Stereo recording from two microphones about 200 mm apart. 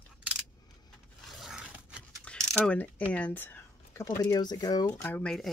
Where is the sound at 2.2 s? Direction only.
5° left (ahead or behind).